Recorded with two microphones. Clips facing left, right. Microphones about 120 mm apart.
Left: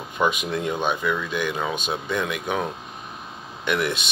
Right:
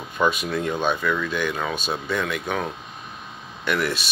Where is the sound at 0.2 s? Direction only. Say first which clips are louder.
Right 1 dB; 15° left (ahead or behind).